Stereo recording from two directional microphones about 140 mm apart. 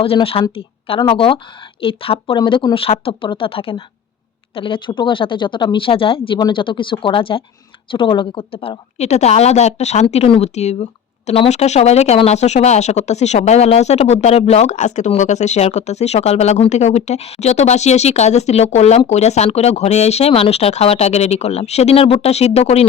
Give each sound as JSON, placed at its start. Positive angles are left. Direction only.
{"t": 0.0, "sound": "speech", "side_deg": 40}